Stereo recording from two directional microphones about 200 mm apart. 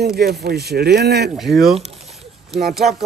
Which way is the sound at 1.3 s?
Centre (ahead or behind).